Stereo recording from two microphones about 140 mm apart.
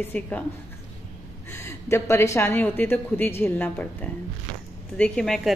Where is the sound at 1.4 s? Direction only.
20° left (ahead or behind).